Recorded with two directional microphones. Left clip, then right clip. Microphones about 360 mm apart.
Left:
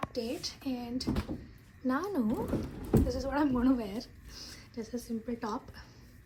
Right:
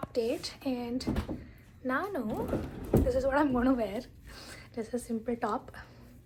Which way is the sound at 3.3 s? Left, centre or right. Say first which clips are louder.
Left 1 dB; centre.